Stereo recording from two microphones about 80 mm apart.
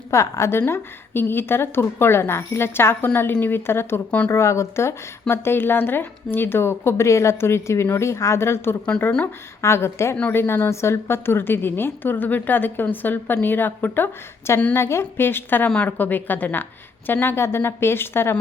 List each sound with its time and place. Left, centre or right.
0.1 s a woman's voice: left